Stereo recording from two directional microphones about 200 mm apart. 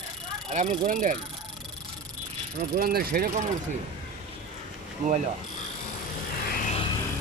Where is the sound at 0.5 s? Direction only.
30° right (ahead or behind).